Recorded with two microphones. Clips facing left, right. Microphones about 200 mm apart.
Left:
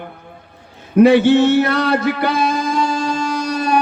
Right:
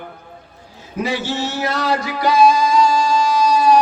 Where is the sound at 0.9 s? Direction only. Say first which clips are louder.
Left 13 dB; 60° left (ahead or behind).